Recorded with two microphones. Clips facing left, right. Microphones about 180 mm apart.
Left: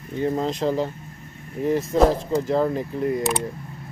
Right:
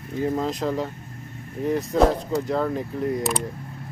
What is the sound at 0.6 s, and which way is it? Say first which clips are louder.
Speech: left 5 dB; 15° left (ahead or behind).